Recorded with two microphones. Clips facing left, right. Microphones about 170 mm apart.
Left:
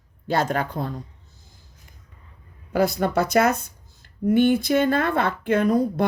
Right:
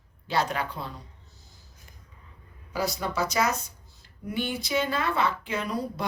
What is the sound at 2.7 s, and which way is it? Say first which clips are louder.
Speech: left 8 dB; 55° left (ahead or behind).